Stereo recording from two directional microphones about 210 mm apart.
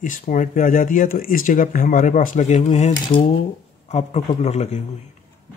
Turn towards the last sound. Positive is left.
turn(degrees=30)  # may be behind; listen again after turning